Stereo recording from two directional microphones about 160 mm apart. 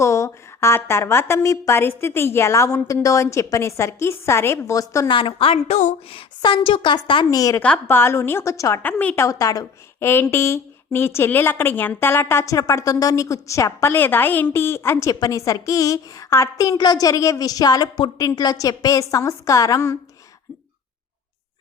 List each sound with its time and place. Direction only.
0.0 s a woman's voice: 20° left (ahead or behind)
7.6 s a woman's voice: 10° left (ahead or behind)